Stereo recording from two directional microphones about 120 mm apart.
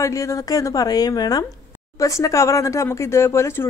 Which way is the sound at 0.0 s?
25° left (ahead or behind).